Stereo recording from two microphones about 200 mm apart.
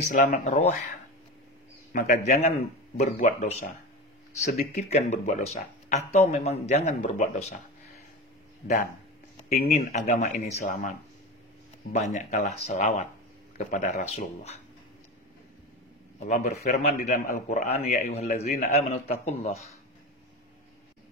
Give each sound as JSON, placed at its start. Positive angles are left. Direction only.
{"t": 0.1, "sound": "speech", "side_deg": 40}
{"t": 1.9, "sound": "speech", "side_deg": 40}
{"t": 9.6, "sound": "speech", "side_deg": 40}
{"t": 11.9, "sound": "speech", "side_deg": 35}
{"t": 16.3, "sound": "speech", "side_deg": 35}